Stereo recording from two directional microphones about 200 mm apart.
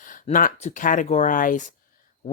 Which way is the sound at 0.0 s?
40° left (ahead or behind).